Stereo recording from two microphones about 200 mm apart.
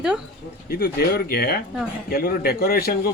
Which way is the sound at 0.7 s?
50° left (ahead or behind).